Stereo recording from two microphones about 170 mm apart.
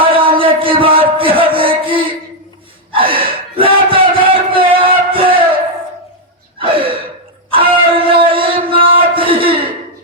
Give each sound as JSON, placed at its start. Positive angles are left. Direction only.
{"t": 0.0, "sound": "a sound", "side_deg": -30}
{"t": 6.6, "sound": "gasp", "side_deg": -30}
{"t": 7.5, "sound": "music", "side_deg": -30}